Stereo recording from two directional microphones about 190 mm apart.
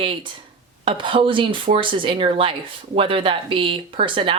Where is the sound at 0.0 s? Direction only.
25° right (ahead or behind).